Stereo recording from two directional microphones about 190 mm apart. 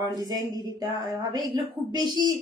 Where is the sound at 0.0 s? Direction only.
20° right (ahead or behind).